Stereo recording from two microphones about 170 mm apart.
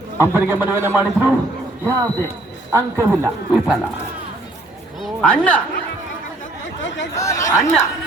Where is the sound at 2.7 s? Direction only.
15° right (ahead or behind).